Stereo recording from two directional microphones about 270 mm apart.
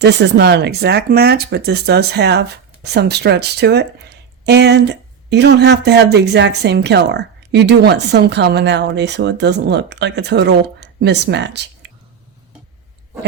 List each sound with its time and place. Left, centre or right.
0.0 s speech: right